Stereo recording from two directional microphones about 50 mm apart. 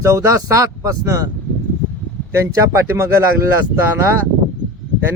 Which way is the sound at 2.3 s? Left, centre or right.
Right.